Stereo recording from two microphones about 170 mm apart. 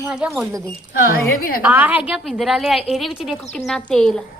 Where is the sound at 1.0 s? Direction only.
60° left (ahead or behind).